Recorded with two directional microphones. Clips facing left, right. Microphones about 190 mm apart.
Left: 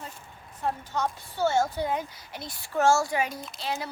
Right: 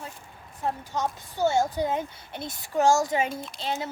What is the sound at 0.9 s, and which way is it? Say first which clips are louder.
A child's voice: right 1 dB; 15° right (ahead or behind).